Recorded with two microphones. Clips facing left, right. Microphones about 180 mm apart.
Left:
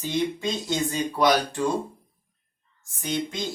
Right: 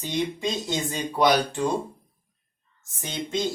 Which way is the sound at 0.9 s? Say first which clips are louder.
Right 1 dB; 20° right (ahead or behind).